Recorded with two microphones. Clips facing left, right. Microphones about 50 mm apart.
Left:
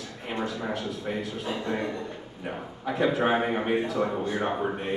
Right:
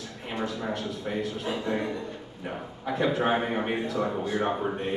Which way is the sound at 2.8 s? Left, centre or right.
Centre.